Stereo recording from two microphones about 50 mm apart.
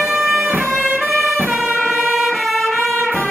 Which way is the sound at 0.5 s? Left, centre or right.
Right.